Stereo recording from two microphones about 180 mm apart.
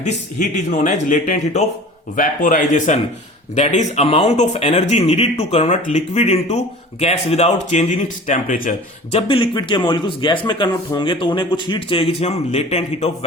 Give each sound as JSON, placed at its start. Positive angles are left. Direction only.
{"t": 0.0, "sound": "speech", "side_deg": 40}
{"t": 9.1, "sound": "a man's voice", "side_deg": 30}